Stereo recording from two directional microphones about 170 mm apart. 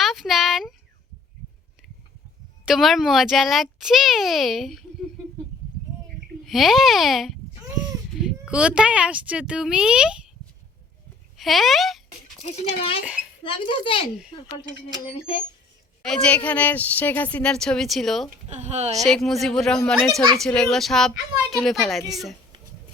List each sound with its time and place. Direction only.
0.0 s a sound: centre (ahead or behind)
2.6 s a child's voice: centre (ahead or behind)
6.4 s a child's voice: centre (ahead or behind)
11.3 s speech: centre (ahead or behind)
13.4 s speech: 30° left (ahead or behind)
16.0 s speech: 5° left (ahead or behind)
18.4 s speech: 40° right (ahead or behind)
19.0 s a child's voice: centre (ahead or behind)